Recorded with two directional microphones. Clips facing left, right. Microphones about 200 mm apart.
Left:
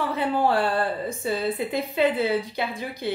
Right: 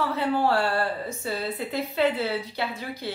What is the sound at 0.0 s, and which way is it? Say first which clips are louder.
Speech: left 1 dB; 15° left (ahead or behind).